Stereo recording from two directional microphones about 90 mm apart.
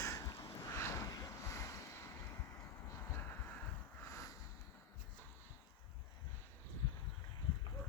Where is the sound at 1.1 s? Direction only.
35° left (ahead or behind).